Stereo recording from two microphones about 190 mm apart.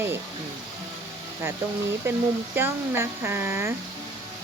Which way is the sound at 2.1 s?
15° right (ahead or behind).